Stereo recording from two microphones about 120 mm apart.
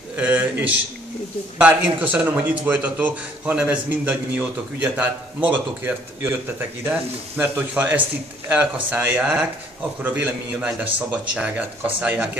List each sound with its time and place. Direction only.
0.2 s a man's voice: 10° right (ahead or behind)